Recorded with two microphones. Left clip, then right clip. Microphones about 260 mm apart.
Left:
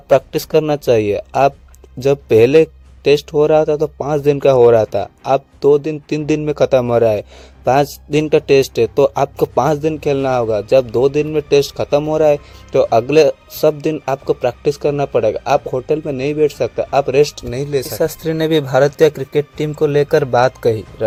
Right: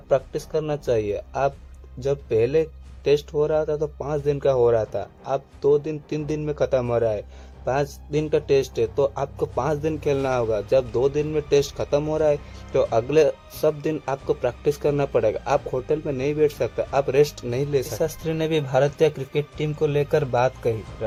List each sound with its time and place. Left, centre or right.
0.1 s speech: left